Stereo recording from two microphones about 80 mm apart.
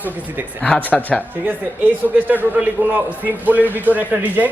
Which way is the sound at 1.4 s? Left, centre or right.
Right.